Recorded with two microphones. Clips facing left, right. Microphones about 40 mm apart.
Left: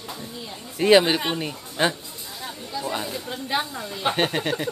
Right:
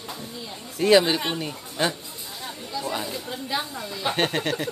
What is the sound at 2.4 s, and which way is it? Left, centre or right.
Chatter, centre.